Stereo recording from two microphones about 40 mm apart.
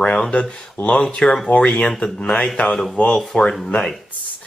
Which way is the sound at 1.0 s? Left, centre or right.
Centre.